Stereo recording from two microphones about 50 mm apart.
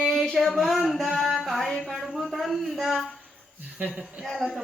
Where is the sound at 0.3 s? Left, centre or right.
Centre.